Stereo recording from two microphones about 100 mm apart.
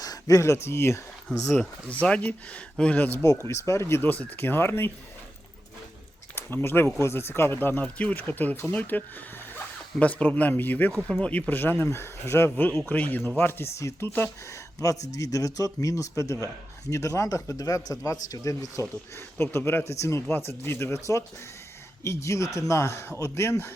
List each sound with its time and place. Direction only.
0.0 s speech: 35° left (ahead or behind)
1.5 s speech: 10° left (ahead or behind)
3.4 s speech: 30° left (ahead or behind)
6.3 s speech: 20° left (ahead or behind)
14.8 s speech: 35° left (ahead or behind)
19.4 s speech: 25° left (ahead or behind)